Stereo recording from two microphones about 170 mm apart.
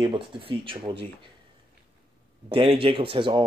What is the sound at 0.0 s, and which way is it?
Speech, 30° right (ahead or behind).